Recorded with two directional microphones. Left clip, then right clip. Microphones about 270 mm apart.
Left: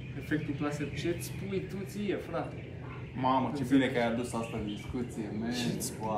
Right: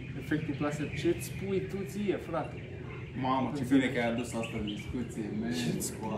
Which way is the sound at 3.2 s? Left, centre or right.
Centre.